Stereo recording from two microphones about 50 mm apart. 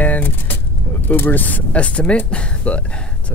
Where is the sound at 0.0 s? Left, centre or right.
Left.